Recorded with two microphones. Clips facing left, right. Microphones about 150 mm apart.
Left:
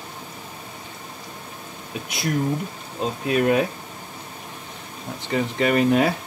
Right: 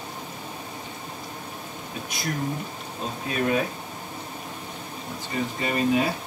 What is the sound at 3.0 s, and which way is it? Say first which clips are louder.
Speech: left 7 dB; 75° left (ahead or behind).